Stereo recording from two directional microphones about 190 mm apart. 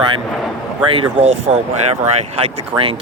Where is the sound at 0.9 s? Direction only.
25° right (ahead or behind).